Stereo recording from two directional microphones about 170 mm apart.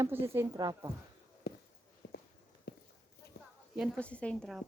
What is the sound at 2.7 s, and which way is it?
Clip-clop, 65° left (ahead or behind).